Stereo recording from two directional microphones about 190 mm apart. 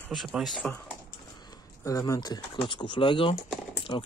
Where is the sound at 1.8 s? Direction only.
15° left (ahead or behind).